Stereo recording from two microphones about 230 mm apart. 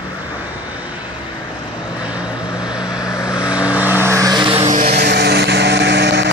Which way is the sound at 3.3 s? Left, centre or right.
Centre.